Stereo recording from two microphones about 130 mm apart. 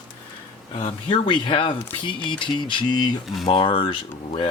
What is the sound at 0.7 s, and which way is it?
Speech, 50° left (ahead or behind).